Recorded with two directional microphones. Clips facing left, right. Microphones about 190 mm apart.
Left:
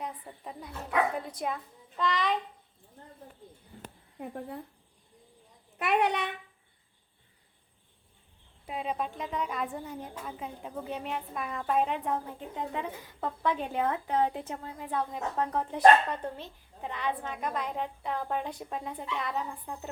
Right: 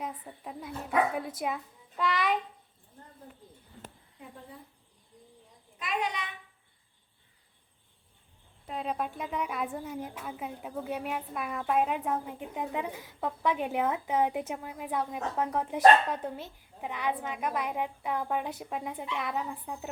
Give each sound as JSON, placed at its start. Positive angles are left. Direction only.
{"t": 0.0, "sound": "a woman's voice", "side_deg": 0}
{"t": 4.2, "sound": "speech", "side_deg": 65}
{"t": 5.8, "sound": "a child's voice", "side_deg": 65}
{"t": 8.6, "sound": "a woman's voice", "side_deg": 5}